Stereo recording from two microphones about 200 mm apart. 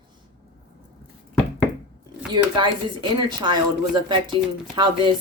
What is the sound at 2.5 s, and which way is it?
Speech, 25° right (ahead or behind).